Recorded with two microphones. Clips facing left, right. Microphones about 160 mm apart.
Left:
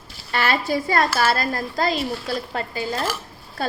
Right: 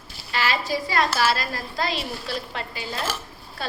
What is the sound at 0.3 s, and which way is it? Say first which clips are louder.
A woman's voice: left 3 dB; 55° left (ahead or behind).